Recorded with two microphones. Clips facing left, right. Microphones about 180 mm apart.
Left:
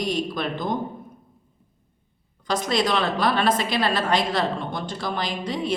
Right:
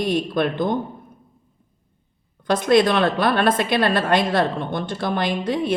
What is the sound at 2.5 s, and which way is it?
A woman's voice, 55° right (ahead or behind).